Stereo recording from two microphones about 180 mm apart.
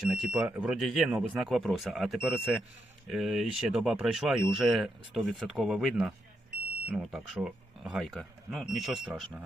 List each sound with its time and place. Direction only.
0.1 s speech: 5° right (ahead or behind)